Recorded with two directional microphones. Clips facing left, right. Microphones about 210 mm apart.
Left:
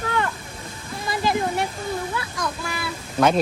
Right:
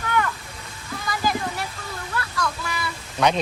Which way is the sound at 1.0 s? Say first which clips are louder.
Left 3 dB; 25° left (ahead or behind).